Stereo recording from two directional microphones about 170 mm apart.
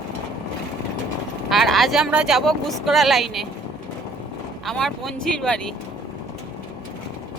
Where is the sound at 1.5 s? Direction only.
Centre (ahead or behind).